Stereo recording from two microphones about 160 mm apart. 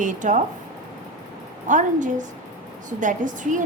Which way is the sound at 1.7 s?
50° right (ahead or behind).